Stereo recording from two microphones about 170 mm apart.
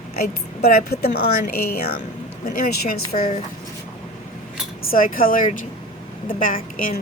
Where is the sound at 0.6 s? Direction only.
65° left (ahead or behind).